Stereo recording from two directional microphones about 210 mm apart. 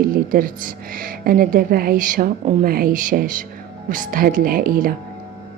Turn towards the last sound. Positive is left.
turn(degrees=-45)  # may be behind; listen again after turning